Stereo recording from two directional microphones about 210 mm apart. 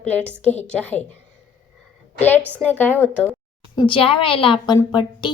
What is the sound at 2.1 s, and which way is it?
A woman's voice, 10° left (ahead or behind).